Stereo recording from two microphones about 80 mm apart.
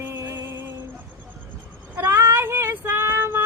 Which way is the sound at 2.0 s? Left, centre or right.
Right.